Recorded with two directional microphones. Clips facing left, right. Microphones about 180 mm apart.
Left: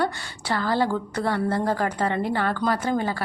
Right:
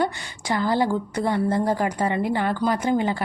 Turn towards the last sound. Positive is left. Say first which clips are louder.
# right 2 dB
turn(degrees=-15)  # may be behind; listen again after turning